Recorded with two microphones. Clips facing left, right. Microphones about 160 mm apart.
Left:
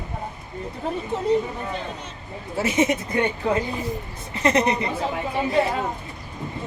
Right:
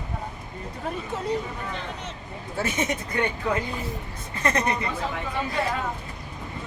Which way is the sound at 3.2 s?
25° left (ahead or behind).